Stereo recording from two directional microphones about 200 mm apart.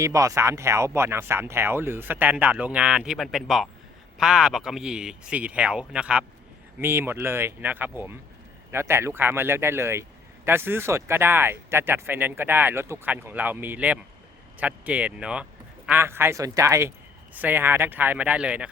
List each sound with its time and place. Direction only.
0.0 s speech: 15° right (ahead or behind)